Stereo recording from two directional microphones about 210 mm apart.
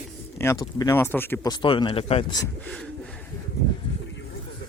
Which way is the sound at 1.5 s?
20° left (ahead or behind).